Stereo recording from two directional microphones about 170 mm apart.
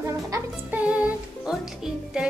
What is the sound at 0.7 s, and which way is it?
Music, 5° right (ahead or behind).